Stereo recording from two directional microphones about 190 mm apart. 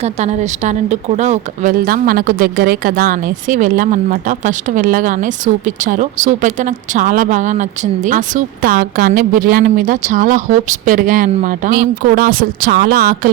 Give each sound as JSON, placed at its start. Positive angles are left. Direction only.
{"t": 0.0, "sound": "a woman's voice", "side_deg": -35}